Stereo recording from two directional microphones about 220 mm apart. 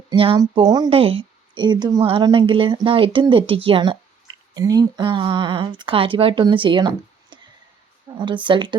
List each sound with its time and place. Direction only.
0.1 s speech: 20° right (ahead or behind)